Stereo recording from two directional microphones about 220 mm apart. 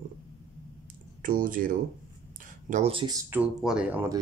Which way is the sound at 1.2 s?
40° right (ahead or behind).